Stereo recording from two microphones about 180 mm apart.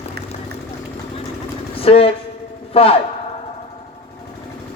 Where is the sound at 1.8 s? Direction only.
30° left (ahead or behind).